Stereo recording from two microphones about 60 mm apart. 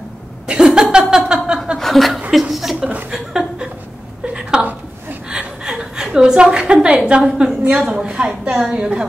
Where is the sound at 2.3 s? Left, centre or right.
Centre.